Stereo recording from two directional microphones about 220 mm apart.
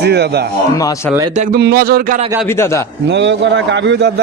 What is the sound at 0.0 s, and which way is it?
Speech, 50° right (ahead or behind).